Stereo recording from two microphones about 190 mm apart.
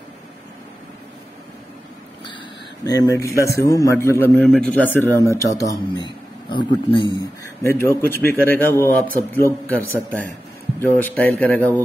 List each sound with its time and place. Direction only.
2.8 s a man's voice: 20° left (ahead or behind)